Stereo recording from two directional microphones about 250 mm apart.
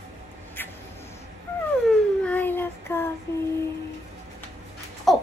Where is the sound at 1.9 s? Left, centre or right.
Centre.